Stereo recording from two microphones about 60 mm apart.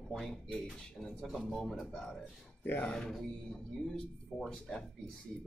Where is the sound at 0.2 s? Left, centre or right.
Centre.